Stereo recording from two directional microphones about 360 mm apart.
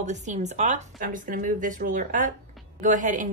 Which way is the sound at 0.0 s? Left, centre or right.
Centre.